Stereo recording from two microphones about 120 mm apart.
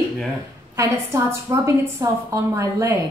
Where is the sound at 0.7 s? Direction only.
25° right (ahead or behind).